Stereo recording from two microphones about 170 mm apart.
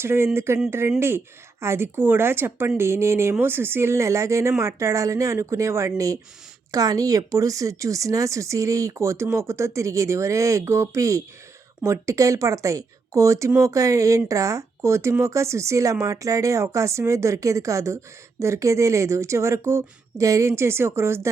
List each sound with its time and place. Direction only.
0.0 s speech: 15° right (ahead or behind)